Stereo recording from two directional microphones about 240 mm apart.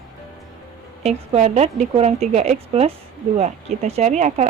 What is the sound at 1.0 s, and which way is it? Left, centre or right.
Speech, right.